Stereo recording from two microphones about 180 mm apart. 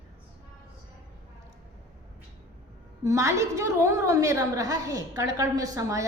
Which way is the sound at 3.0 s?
15° right (ahead or behind).